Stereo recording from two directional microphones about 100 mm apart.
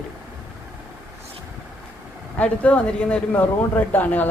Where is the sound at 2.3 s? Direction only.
15° left (ahead or behind).